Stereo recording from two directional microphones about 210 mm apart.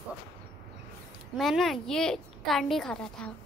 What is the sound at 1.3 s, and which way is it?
A woman's voice, centre (ahead or behind).